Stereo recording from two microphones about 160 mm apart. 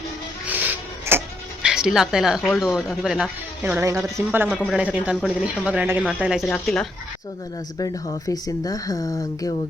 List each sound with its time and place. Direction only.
0.4 s a sound: 10° right (ahead or behind)
1.6 s speech: 5° right (ahead or behind)
3.6 s speech: 15° right (ahead or behind); by 6.8 s centre (ahead or behind)
7.8 s speech: 20° left (ahead or behind)